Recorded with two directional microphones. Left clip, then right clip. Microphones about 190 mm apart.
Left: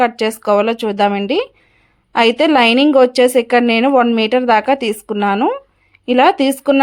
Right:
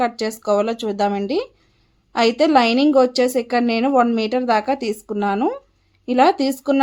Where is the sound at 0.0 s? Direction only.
20° left (ahead or behind).